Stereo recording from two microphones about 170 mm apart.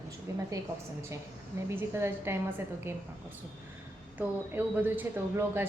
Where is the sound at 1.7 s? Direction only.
15° right (ahead or behind).